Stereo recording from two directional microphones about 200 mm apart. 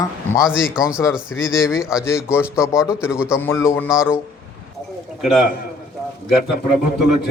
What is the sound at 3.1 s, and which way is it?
Speech, 5° right (ahead or behind).